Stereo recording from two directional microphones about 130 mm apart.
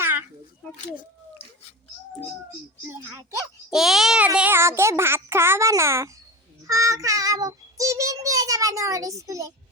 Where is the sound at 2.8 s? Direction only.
20° right (ahead or behind).